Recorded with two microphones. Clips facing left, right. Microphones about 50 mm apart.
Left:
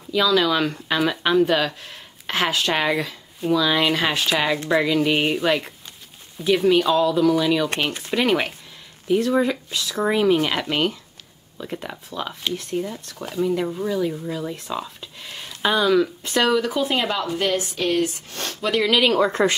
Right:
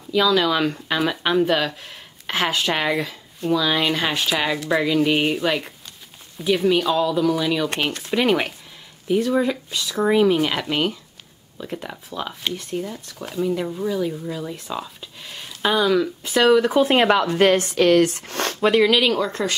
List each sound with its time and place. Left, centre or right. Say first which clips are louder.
0.1 s speech: right 1 dB; centre
16.6 s speech: right 6 dB; right
19.1 s speech: left 4 dB; left